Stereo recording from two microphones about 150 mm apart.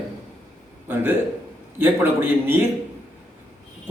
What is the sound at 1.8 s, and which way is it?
Speech, 15° right (ahead or behind).